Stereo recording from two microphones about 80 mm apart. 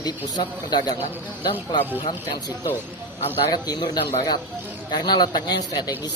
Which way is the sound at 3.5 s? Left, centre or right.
Left.